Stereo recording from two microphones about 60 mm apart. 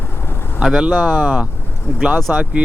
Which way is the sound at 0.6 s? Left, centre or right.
Centre.